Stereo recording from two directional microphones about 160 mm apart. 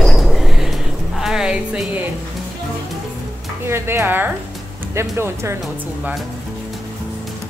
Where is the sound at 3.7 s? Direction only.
15° right (ahead or behind).